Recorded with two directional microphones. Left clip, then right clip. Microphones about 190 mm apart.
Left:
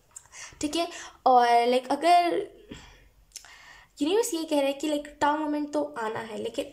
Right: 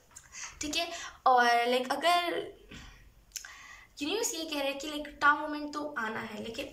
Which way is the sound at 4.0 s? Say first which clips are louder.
Left 8 dB; 35° left (ahead or behind).